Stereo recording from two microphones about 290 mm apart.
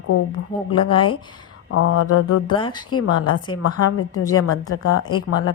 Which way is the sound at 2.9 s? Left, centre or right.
Left.